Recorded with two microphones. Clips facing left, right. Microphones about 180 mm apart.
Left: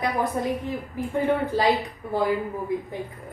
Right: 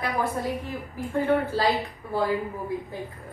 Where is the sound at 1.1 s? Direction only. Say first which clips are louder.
Even; 20° left (ahead or behind).